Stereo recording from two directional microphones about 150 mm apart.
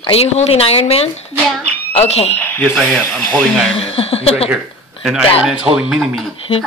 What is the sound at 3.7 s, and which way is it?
Speech, 40° left (ahead or behind).